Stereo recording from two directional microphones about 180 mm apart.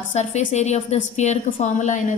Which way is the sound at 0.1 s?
40° left (ahead or behind).